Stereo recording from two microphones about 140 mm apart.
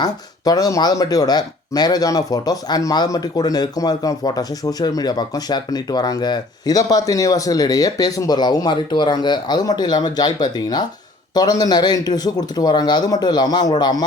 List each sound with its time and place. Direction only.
0.0 s speech: 25° left (ahead or behind)